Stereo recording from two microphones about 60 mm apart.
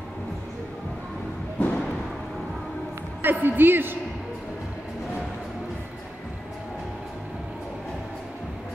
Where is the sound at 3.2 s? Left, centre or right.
Right.